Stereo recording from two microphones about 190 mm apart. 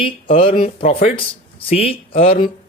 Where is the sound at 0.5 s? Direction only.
45° left (ahead or behind).